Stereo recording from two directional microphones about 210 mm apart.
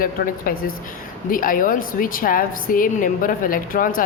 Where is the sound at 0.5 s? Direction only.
45° left (ahead or behind).